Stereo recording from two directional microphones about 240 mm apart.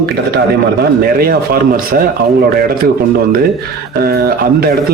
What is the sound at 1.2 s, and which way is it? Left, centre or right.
Speech, right.